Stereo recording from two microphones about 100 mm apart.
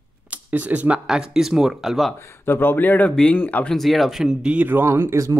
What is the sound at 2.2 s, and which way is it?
Speech, 25° left (ahead or behind).